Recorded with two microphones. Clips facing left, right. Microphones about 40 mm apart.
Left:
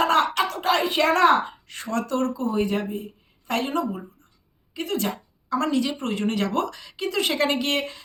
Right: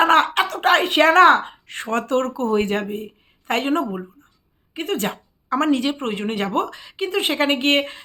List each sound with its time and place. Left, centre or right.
0.0 s a woman's voice: right
2.3 s a woman's voice: right